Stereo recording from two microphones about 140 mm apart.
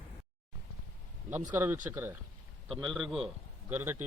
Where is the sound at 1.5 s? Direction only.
15° right (ahead or behind).